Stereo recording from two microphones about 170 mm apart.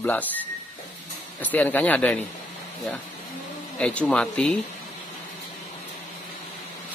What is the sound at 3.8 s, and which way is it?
Speech, 5° left (ahead or behind).